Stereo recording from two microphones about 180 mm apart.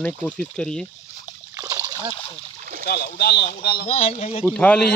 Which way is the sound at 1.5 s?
20° right (ahead or behind).